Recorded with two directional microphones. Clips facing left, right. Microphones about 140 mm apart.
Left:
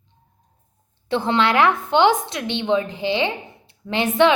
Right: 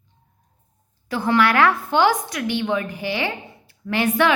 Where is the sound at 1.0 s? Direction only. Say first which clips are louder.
Even; 25° left (ahead or behind).